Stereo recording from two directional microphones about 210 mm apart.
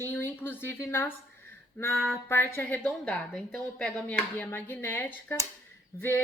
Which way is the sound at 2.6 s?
5° left (ahead or behind).